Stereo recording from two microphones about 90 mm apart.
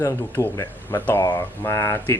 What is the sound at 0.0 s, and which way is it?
Speech, 35° left (ahead or behind).